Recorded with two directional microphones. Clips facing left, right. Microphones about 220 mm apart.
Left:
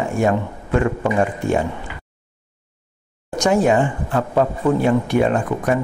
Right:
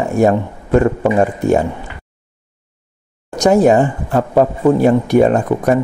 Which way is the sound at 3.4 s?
40° right (ahead or behind).